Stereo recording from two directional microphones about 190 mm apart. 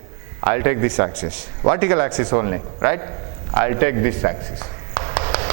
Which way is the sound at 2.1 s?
25° right (ahead or behind).